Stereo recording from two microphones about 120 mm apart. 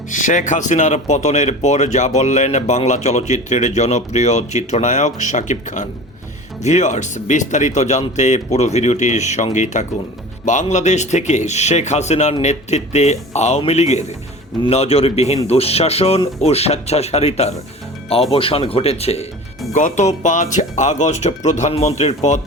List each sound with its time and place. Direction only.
0.1 s speech: 90° left
6.6 s speech: 75° left (ahead or behind)
8.5 s speech: 70° left (ahead or behind)
19.7 s speech: 80° left